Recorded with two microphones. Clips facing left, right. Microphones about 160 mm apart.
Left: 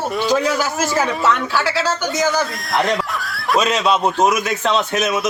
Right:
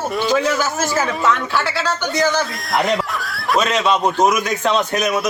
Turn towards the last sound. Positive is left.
turn(degrees=0)  # may be behind; listen again after turning